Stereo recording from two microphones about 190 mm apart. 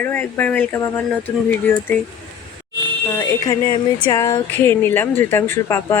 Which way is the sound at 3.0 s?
15° left (ahead or behind).